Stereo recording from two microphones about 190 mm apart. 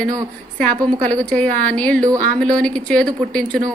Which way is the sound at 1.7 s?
5° left (ahead or behind).